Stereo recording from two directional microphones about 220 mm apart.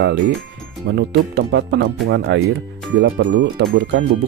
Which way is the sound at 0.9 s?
55° right (ahead or behind).